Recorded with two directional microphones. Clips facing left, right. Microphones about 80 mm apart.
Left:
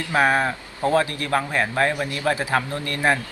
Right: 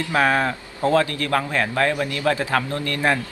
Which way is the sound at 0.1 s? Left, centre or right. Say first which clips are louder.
Left 1 dB; left.